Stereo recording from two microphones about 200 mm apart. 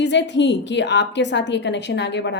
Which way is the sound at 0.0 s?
60° left (ahead or behind).